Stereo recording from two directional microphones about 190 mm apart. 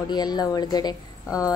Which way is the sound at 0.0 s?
20° left (ahead or behind).